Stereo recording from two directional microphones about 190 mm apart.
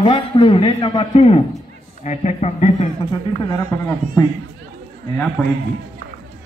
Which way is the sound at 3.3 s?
20° left (ahead or behind).